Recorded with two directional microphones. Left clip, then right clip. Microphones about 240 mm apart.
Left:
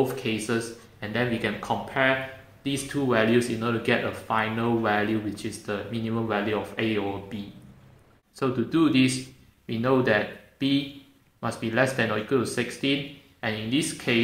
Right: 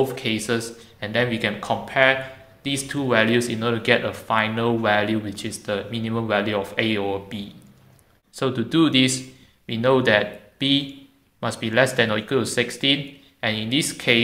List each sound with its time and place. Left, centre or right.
0.0 s speech: right